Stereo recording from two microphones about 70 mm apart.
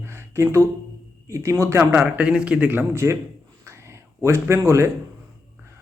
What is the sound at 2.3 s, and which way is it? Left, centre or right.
Speech, centre.